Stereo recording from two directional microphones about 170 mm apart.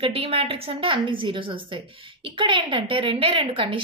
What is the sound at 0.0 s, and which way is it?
A woman's voice, 35° right (ahead or behind).